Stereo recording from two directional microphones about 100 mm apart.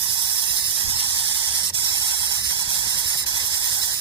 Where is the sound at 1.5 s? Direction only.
40° right (ahead or behind).